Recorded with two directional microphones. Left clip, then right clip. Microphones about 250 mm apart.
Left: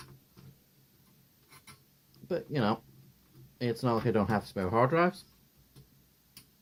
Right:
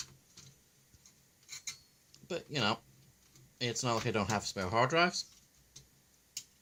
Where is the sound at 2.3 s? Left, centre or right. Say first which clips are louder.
Left 3 dB; centre.